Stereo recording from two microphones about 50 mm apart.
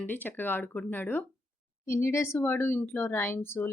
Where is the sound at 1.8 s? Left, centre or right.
Left.